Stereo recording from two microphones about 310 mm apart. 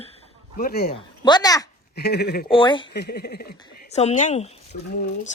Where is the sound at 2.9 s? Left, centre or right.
Left.